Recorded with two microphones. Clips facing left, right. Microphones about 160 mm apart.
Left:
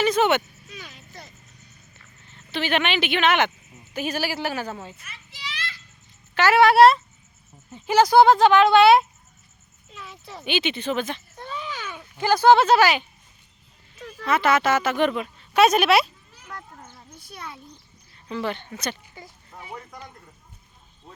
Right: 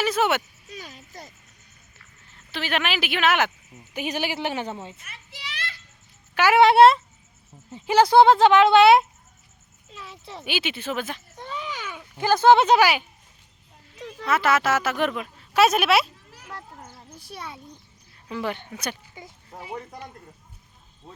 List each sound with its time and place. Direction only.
0.0 s vehicle: 5° right (ahead or behind)
0.7 s a sound: 40° right (ahead or behind)
2.3 s speech: centre (ahead or behind)
3.9 s speech: 15° right (ahead or behind)
5.0 s children playing: 55° right (ahead or behind)
6.3 s speech: 10° right (ahead or behind)
6.6 s speech: 25° right (ahead or behind)
10.4 s speech: 5° right (ahead or behind)
11.3 s a sound: 15° right (ahead or behind)
12.4 s speech: 20° right (ahead or behind)
13.9 s a sound: 20° right (ahead or behind)
14.3 s speech: 5° right (ahead or behind)
18.1 s speech: 5° right (ahead or behind)
19.5 s speech: 35° right (ahead or behind)